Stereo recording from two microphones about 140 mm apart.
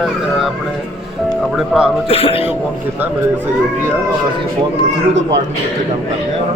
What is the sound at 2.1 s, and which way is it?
Speech, 45° left (ahead or behind).